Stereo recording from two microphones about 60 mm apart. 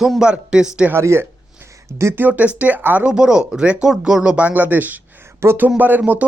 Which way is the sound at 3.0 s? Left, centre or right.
Centre.